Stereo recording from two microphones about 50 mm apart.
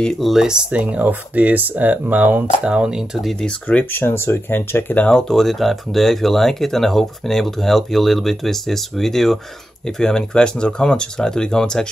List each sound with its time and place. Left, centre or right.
0.2 s speech: centre
0.7 s speech: right
2.6 s speech: right
3.9 s speech: left
5.1 s speech: centre